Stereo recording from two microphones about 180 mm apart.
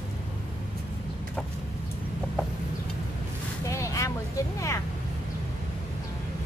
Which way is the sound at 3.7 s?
15° left (ahead or behind).